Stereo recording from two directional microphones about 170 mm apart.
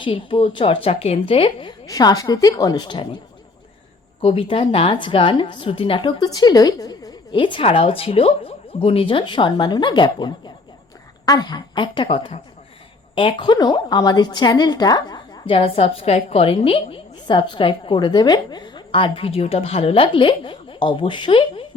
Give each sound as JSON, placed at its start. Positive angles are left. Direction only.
{"t": 0.0, "sound": "a woman's voice", "side_deg": 30}
{"t": 1.9, "sound": "a woman's voice", "side_deg": 20}
{"t": 4.2, "sound": "a woman's voice", "side_deg": 35}